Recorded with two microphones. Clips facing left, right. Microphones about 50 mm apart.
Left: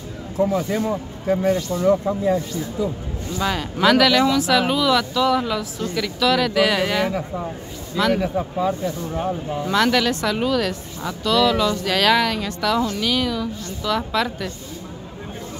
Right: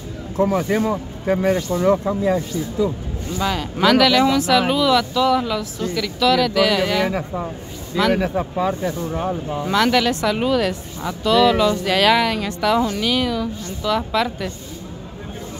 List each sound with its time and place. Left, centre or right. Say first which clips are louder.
0.4 s speech: right 2 dB; right
1.8 s speech: right 1 dB; right
2.8 s speech: right 4 dB; right
3.3 s speech: right 1 dB; centre
8.1 s speech: right 1 dB; right
9.7 s speech: right 1 dB; centre